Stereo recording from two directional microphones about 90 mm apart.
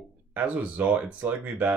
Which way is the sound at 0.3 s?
20° right (ahead or behind).